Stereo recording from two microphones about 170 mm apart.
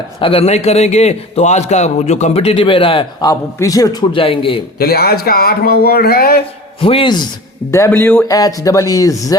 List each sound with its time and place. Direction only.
0.2 s a man's voice: 35° left (ahead or behind)
4.8 s speech: 65° left (ahead or behind)
6.7 s a man's voice: 30° left (ahead or behind)
7.7 s speech: 15° left (ahead or behind)